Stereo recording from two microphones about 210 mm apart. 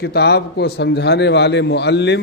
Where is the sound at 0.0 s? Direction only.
50° left (ahead or behind).